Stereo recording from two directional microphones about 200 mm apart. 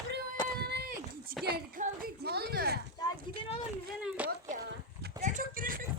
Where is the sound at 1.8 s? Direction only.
35° right (ahead or behind).